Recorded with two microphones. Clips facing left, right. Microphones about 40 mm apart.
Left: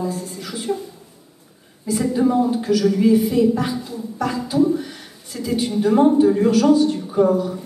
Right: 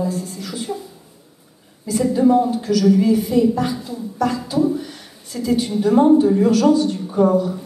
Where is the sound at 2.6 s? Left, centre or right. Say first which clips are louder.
Right 1 dB; centre.